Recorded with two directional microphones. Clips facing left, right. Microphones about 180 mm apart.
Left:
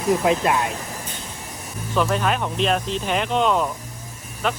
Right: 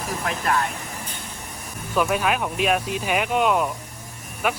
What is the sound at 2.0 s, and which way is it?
Speech, 10° right (ahead or behind).